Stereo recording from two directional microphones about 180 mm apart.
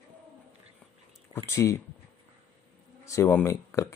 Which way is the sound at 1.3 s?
15° left (ahead or behind).